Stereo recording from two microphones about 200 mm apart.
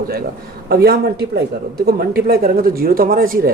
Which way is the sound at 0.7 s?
50° right (ahead or behind).